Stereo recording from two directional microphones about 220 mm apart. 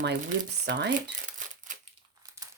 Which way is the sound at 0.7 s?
55° right (ahead or behind).